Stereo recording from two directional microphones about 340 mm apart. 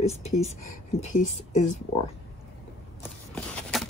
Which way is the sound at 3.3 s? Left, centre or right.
Centre.